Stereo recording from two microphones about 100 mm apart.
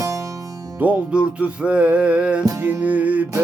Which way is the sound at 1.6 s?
15° right (ahead or behind).